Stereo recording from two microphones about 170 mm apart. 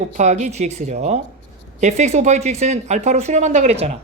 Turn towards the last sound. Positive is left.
turn(degrees=-40)  # may be behind; listen again after turning